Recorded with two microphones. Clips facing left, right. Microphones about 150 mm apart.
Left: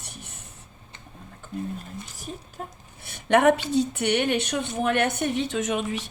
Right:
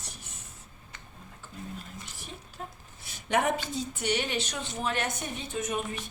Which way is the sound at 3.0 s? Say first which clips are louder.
Left 9 dB; 60° left (ahead or behind).